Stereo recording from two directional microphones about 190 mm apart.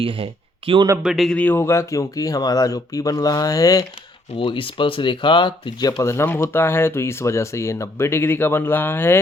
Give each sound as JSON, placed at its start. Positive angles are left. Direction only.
{"t": 0.0, "sound": "speech", "side_deg": -30}
{"t": 1.0, "sound": "speech", "side_deg": 0}
{"t": 6.0, "sound": "speech", "side_deg": 15}